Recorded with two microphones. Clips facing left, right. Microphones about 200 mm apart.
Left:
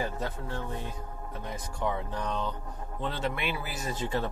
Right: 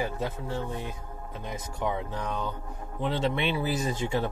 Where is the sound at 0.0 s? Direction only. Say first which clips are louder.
Right 2 dB; 10° right (ahead or behind).